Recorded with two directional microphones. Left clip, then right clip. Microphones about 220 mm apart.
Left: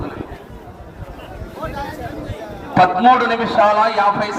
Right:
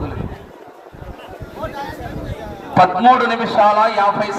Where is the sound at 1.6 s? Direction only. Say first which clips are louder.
Even; 50° right (ahead or behind).